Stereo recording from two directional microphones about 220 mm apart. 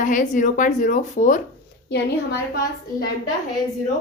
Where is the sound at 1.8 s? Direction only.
50° left (ahead or behind).